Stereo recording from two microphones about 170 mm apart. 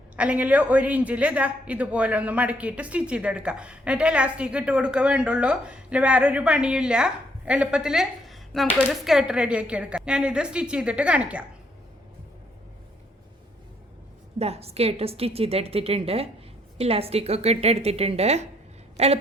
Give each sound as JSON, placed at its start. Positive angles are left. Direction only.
{"t": 0.2, "sound": "speech", "side_deg": -5}
{"t": 14.3, "sound": "a woman's voice", "side_deg": -40}